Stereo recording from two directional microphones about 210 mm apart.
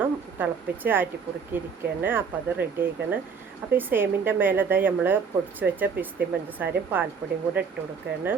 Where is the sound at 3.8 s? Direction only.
10° right (ahead or behind).